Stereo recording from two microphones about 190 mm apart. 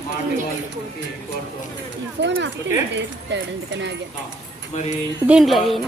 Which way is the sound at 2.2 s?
70° right (ahead or behind).